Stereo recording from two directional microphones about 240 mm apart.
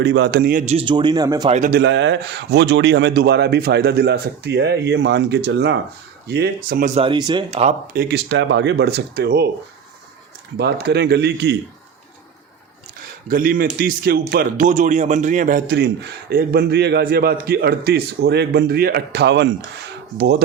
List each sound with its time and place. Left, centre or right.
0.0 s speech: right; by 1.5 s centre
1.5 s speech: right
8.0 s speech: right
10.6 s speech: right
13.3 s a man's voice: right